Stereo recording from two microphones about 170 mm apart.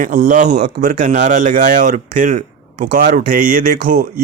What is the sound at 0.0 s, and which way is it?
A man's voice, 50° right (ahead or behind).